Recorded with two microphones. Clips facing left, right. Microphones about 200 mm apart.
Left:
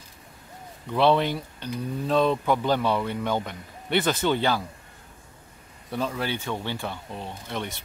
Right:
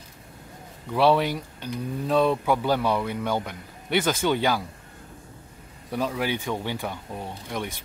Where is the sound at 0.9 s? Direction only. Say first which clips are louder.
Even; 10° right (ahead or behind).